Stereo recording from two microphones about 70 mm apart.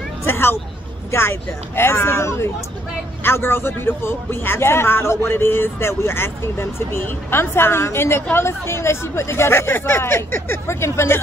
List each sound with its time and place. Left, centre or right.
0.2 s a man's voice: left